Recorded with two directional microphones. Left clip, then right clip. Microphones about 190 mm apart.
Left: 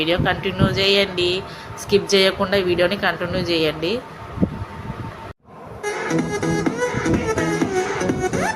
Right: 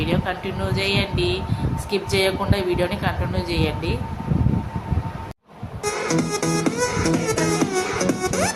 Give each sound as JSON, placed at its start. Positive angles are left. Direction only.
{"t": 0.0, "sound": "speech", "side_deg": 15}
{"t": 5.8, "sound": "music", "side_deg": -35}